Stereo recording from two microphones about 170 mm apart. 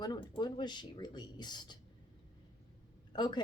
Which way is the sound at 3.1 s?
25° left (ahead or behind).